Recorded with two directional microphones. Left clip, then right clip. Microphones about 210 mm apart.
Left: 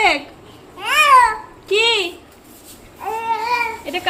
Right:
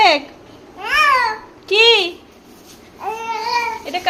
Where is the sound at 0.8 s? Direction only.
10° right (ahead or behind).